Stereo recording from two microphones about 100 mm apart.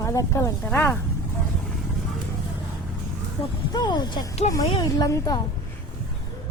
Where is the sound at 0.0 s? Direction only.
30° left (ahead or behind).